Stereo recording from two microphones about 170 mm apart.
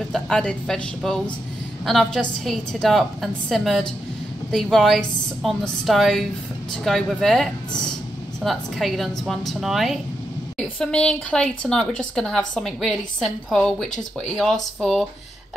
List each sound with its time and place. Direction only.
0.1 s a woman's voice: 5° left (ahead or behind)